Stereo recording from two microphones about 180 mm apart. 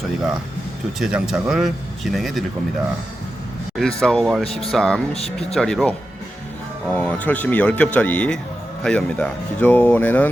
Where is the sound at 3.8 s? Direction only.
5° left (ahead or behind).